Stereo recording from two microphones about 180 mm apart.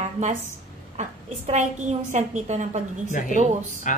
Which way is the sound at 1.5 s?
40° right (ahead or behind).